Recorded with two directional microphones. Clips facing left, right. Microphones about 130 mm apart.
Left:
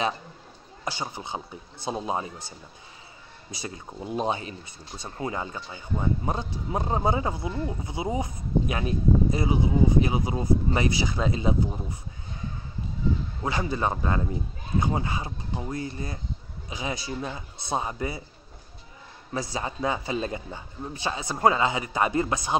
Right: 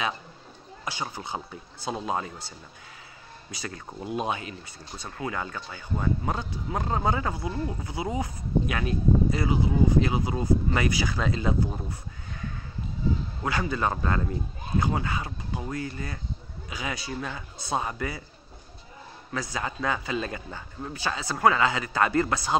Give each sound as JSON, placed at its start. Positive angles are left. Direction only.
{"t": 1.0, "sound": "speech", "side_deg": 20}
{"t": 3.5, "sound": "speech", "side_deg": 25}
{"t": 11.9, "sound": "neigh", "side_deg": 25}
{"t": 13.4, "sound": "speech", "side_deg": 25}
{"t": 19.3, "sound": "speech", "side_deg": 25}